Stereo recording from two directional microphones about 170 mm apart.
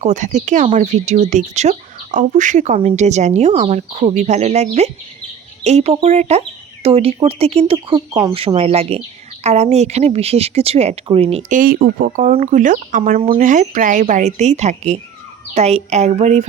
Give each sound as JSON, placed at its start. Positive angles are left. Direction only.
{"t": 0.0, "sound": "speech", "side_deg": -45}
{"t": 11.5, "sound": "speech", "side_deg": -55}